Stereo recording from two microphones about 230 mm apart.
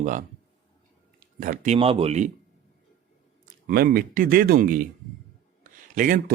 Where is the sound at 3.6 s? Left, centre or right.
Right.